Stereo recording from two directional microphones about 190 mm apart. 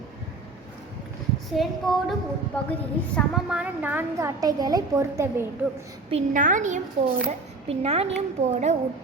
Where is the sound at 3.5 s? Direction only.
5° right (ahead or behind).